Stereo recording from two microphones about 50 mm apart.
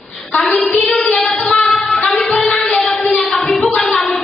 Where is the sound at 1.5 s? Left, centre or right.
Left.